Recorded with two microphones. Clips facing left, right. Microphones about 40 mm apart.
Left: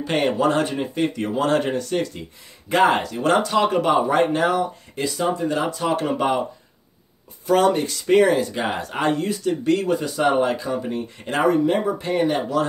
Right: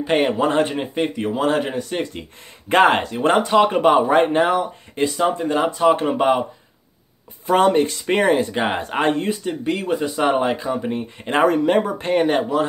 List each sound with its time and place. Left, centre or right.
0.0 s speech: centre
2.7 s speech: right
7.4 s speech: right
9.5 s speech: centre
11.4 s speech: right